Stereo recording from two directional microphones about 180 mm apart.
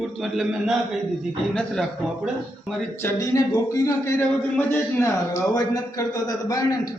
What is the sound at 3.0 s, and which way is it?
A man's voice, 20° left (ahead or behind).